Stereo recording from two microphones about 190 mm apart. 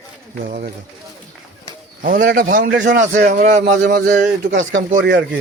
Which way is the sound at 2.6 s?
70° right (ahead or behind).